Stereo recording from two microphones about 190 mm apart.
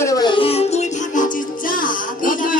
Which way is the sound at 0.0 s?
20° left (ahead or behind).